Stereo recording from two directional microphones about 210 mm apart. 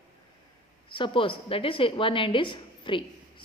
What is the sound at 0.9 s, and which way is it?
A woman's voice, 25° left (ahead or behind).